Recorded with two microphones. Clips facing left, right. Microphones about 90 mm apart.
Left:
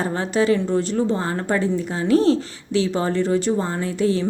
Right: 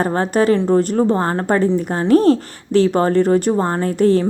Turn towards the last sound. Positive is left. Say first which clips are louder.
# right 6 dB
turn(degrees=-50)  # may be behind; listen again after turning